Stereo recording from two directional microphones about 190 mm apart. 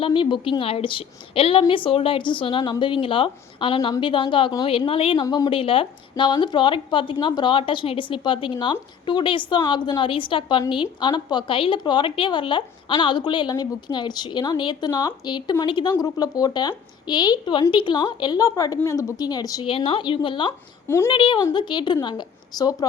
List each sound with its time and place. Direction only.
0.0 s a woman's voice: 25° left (ahead or behind)
20.8 s speech: 15° left (ahead or behind)
21.1 s a woman's voice: 25° left (ahead or behind)